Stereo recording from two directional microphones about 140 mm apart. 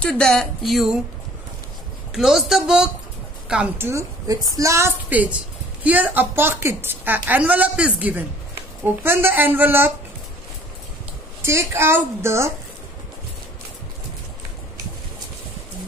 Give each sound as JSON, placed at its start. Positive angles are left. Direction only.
{"t": 0.0, "sound": "speech", "side_deg": 5}
{"t": 2.1, "sound": "a woman's voice", "side_deg": 0}
{"t": 11.4, "sound": "a woman's voice", "side_deg": -20}